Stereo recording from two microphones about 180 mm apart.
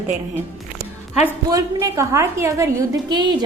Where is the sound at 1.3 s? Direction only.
15° right (ahead or behind).